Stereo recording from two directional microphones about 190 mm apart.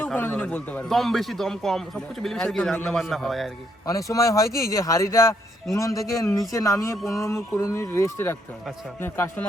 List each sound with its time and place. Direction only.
0.0 s a man's voice: 10° left (ahead or behind)
3.8 s a man's voice: 15° left (ahead or behind)